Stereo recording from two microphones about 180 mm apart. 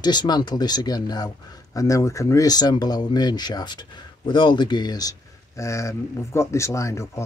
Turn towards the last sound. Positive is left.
turn(degrees=15)  # may be behind; listen again after turning